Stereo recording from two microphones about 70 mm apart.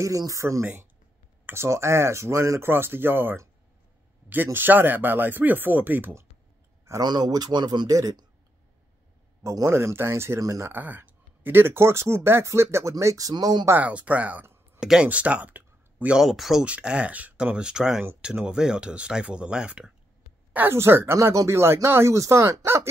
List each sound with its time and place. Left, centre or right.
0.0 s speech: right
2.7 s speech: right
7.0 s a man's voice: right
9.4 s speech: right
10.4 s speech: right
10.7 s speech: right
13.0 s speech: right
13.3 s speech: right
13.7 s speech: right
16.2 s speech: centre
16.6 s speech: centre
20.5 s speech: right